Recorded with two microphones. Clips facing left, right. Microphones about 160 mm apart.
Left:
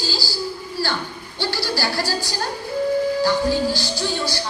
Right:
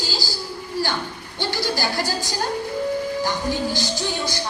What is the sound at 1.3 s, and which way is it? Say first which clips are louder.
Speech: even; 20° right (ahead or behind).